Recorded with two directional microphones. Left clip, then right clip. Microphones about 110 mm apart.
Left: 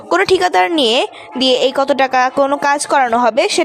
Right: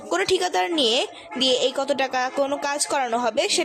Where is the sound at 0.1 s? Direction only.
45° left (ahead or behind).